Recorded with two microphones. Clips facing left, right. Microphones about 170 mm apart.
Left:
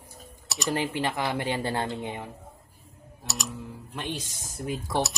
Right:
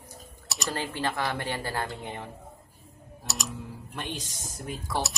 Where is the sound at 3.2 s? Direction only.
Centre (ahead or behind).